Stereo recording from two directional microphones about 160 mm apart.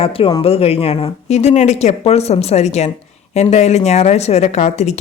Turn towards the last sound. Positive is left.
turn(degrees=45)  # may be behind; listen again after turning